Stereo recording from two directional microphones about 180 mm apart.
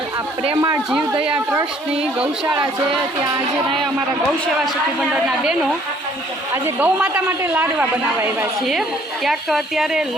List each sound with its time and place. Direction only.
0.4 s speech: 20° right (ahead or behind)
1.2 s a woman's voice: 10° right (ahead or behind)
6.5 s speech: 10° right (ahead or behind)
9.2 s a woman's voice: centre (ahead or behind)